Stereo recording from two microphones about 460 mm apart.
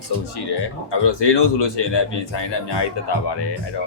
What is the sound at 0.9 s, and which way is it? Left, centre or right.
A man's voice, left.